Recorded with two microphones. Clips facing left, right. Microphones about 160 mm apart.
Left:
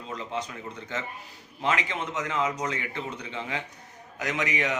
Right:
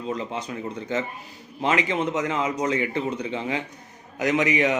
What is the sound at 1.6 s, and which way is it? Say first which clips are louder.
Speech: right 5 dB; 20° right (ahead or behind).